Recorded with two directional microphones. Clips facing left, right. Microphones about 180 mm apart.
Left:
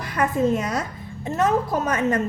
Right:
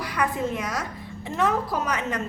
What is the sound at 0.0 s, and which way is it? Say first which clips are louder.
A woman's voice: left 5 dB; 45° left (ahead or behind).